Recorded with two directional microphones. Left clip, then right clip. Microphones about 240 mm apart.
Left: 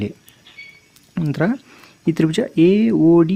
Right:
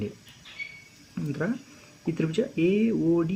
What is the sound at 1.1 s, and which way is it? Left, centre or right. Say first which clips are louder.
Speech: left 10 dB; left.